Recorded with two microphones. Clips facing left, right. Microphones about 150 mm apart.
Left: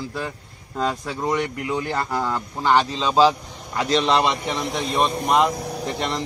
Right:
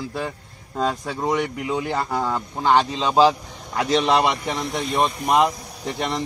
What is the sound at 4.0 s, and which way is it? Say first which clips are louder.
Speech: right 1 dB; 20° right (ahead or behind).